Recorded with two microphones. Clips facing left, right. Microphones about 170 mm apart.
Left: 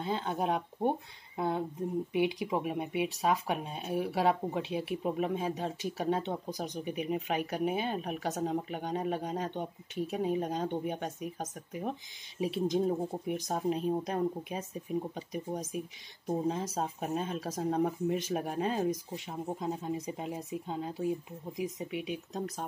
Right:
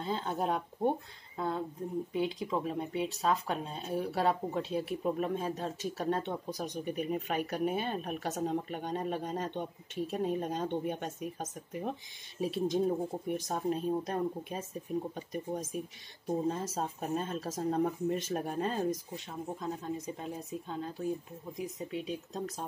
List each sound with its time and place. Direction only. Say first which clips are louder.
0.0 s speech: left 1 dB; 5° left (ahead or behind)
2.1 s speech: left 3 dB; 15° left (ahead or behind)
19.6 s speech: left 2 dB; 20° left (ahead or behind)